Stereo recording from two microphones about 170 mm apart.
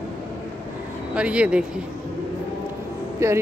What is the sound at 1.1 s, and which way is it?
Speech, 5° right (ahead or behind).